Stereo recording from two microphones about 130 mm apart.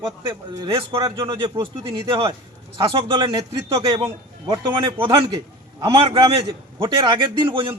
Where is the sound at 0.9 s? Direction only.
25° right (ahead or behind).